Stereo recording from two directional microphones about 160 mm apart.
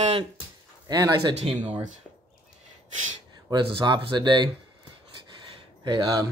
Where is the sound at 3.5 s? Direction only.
25° right (ahead or behind).